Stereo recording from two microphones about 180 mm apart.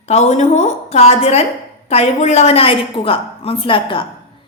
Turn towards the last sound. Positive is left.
turn(degrees=30)  # may be behind; listen again after turning